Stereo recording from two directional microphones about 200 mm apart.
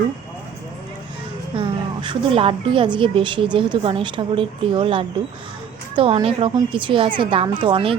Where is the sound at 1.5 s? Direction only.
25° right (ahead or behind).